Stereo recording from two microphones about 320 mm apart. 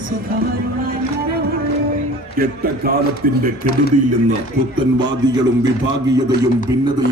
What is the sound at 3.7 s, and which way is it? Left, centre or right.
Speech, left.